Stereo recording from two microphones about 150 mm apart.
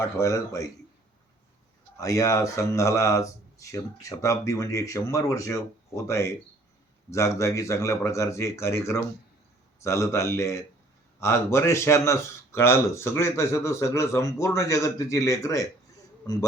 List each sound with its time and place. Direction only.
0.0 s speech: 20° left (ahead or behind)
2.0 s speech: 20° left (ahead or behind)